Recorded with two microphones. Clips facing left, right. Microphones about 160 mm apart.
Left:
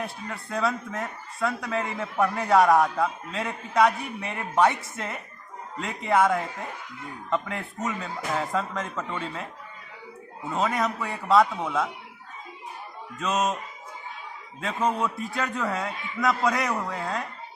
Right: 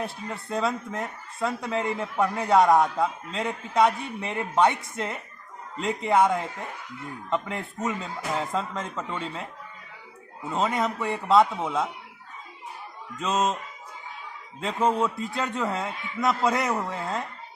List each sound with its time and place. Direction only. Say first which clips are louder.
0.0 s speech: right 1 dB; 25° right (ahead or behind)
10.6 s speech: even; 25° right (ahead or behind)
13.1 s speech: even; 20° right (ahead or behind)
14.6 s speech: right 2 dB; 25° right (ahead or behind)